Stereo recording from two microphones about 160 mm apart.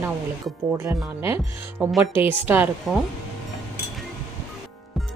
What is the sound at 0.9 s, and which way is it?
Speech, 15° right (ahead or behind).